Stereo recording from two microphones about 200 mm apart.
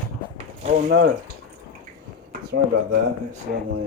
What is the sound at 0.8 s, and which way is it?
Speech, 50° right (ahead or behind).